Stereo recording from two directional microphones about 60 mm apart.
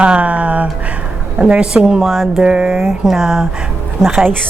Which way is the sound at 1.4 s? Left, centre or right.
Centre.